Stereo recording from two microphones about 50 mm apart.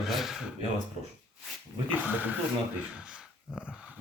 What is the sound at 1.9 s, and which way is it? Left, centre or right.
Speech, right.